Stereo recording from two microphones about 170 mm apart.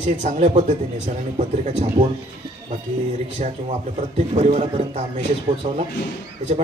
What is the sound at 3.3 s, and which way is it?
Speech, 35° right (ahead or behind).